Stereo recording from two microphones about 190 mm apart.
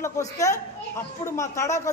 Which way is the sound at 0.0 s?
15° left (ahead or behind).